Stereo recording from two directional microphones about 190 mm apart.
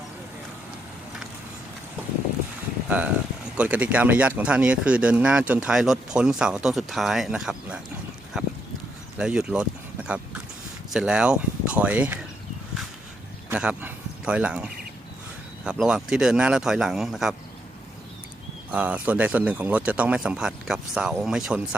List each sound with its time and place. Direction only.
3.6 s speech: 5° right (ahead or behind)
8.4 s a sound: 5° right (ahead or behind)
9.1 s speech: 5° right (ahead or behind)
13.5 s speech: 10° right (ahead or behind)
18.7 s speech: 10° right (ahead or behind)